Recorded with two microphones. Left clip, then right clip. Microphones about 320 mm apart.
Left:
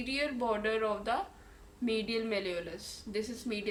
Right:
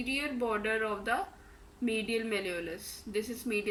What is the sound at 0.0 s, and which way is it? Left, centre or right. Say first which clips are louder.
Speech: even; centre.